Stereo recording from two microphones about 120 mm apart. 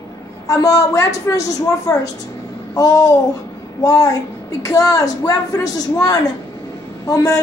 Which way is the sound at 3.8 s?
30° left (ahead or behind).